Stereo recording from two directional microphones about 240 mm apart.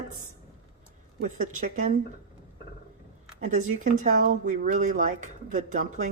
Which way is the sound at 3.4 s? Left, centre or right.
Right.